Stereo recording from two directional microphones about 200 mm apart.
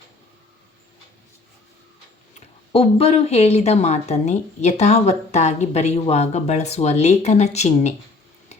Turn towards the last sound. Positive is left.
turn(degrees=35)  # may be behind; listen again after turning